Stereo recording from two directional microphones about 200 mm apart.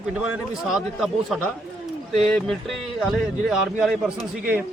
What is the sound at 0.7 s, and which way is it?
A man's voice, centre (ahead or behind).